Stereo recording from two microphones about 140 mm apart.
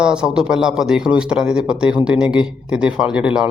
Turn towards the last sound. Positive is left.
turn(degrees=-5)  # may be behind; listen again after turning